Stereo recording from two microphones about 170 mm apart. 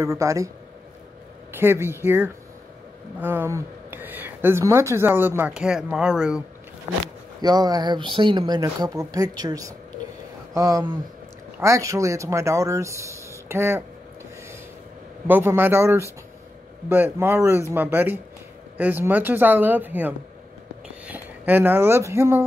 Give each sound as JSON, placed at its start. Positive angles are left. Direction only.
{"t": 0.0, "sound": "speech", "side_deg": -15}
{"t": 1.5, "sound": "speech", "side_deg": -15}
{"t": 7.4, "sound": "speech", "side_deg": -25}
{"t": 15.2, "sound": "speech", "side_deg": -10}